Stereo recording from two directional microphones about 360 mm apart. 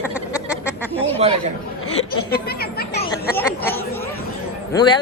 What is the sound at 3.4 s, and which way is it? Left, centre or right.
Speech, centre.